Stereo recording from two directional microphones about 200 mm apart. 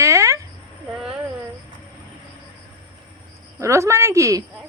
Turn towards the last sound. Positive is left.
turn(degrees=-15)  # may be behind; listen again after turning